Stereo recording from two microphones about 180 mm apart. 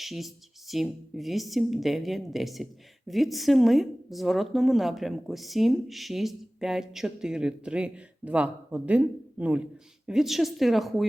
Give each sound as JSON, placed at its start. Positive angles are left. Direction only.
{"t": 0.0, "sound": "a woman's voice", "side_deg": 0}